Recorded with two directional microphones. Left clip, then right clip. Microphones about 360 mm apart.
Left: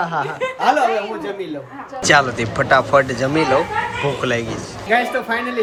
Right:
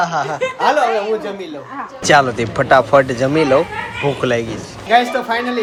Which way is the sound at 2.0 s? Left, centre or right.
Centre.